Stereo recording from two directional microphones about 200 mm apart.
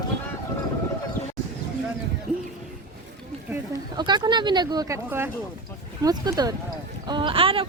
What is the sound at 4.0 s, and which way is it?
Speech, 20° right (ahead or behind).